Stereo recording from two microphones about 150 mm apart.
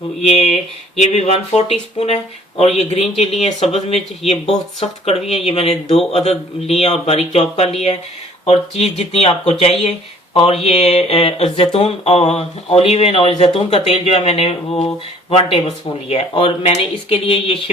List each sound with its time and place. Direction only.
0.2 s speech: 45° left (ahead or behind)